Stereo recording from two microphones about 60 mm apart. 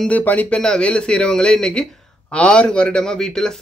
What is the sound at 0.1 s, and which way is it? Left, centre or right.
Speech, left.